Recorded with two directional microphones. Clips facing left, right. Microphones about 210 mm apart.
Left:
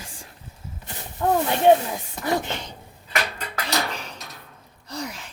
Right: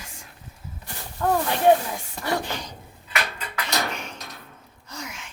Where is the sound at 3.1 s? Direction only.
35° left (ahead or behind).